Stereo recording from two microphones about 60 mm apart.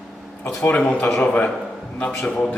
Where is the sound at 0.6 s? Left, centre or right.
Left.